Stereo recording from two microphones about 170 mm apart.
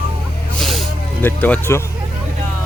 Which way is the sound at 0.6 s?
Centre (ahead or behind).